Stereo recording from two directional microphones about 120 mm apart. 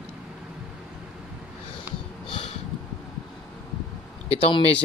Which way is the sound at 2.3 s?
50° left (ahead or behind).